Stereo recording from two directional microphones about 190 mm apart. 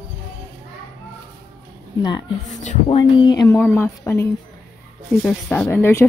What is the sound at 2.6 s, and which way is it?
Speech, 40° left (ahead or behind).